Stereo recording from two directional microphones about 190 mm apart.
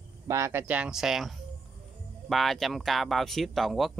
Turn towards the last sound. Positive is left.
turn(degrees=0)  # may be behind; listen again after turning